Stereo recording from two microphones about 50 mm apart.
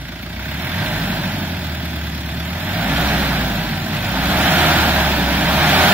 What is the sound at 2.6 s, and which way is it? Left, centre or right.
Vehicle, right.